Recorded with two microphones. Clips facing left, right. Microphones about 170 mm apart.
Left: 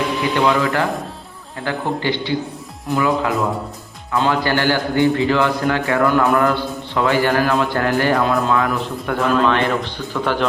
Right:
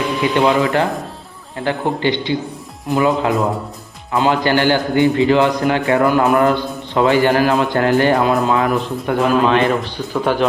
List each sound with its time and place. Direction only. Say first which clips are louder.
0.2 s a man's voice: right 3 dB; 20° right (ahead or behind)